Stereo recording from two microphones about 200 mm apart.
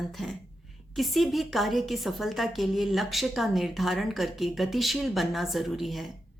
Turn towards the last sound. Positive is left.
turn(degrees=0)  # may be behind; listen again after turning